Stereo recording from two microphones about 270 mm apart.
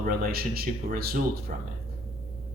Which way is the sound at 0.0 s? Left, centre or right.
Right.